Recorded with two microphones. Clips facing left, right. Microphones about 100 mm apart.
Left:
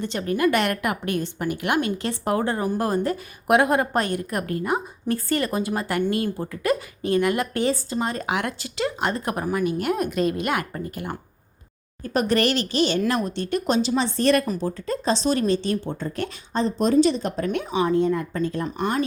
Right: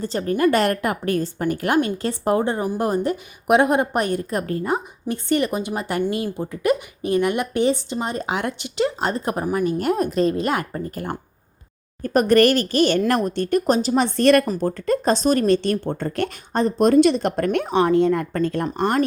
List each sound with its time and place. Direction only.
0.0 s a woman's voice: 35° right (ahead or behind); by 9.6 s 20° right (ahead or behind)
9.6 s a woman's voice: 40° right (ahead or behind)
12.0 s speech: 50° right (ahead or behind)
13.9 s speech: 60° right (ahead or behind)